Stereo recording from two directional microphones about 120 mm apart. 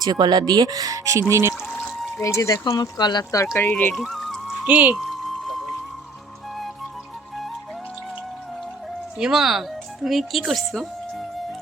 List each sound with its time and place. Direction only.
0.0 s speech: 35° right (ahead or behind)
1.9 s pour: centre (ahead or behind)
2.2 s speech: 25° left (ahead or behind)
3.4 s speech: 20° left (ahead or behind)
3.9 s music: centre (ahead or behind)
4.6 s speech: 10° right (ahead or behind)
4.9 s music: centre (ahead or behind)
9.1 s speech: 5° right (ahead or behind)